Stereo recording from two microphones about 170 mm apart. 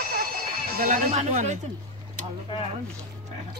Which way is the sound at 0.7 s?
50° right (ahead or behind).